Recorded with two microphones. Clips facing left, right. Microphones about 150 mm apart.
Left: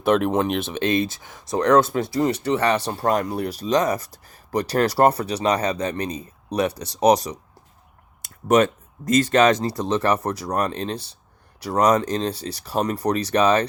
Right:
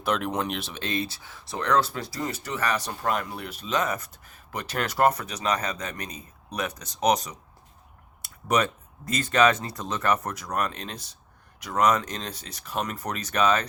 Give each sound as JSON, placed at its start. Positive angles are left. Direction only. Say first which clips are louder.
{"t": 0.0, "sound": "speech", "louder": "left 8 dB", "side_deg": 55}
{"t": 1.1, "sound": "speech", "louder": "left 10 dB", "side_deg": 45}
{"t": 2.0, "sound": "speech", "louder": "left 10 dB", "side_deg": 25}
{"t": 8.4, "sound": "speech", "louder": "left 7 dB", "side_deg": 45}